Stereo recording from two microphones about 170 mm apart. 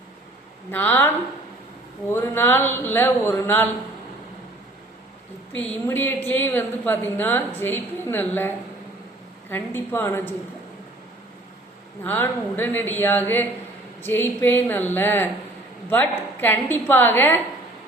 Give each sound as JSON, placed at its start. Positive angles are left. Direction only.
{"t": 0.7, "sound": "a woman's voice", "side_deg": 10}
{"t": 5.5, "sound": "a woman's voice", "side_deg": 10}
{"t": 12.0, "sound": "a woman's voice", "side_deg": 10}